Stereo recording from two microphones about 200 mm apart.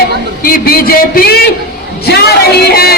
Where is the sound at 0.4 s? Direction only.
45° left (ahead or behind).